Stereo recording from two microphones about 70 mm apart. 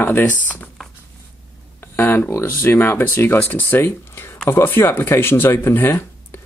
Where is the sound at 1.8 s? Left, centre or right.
Left.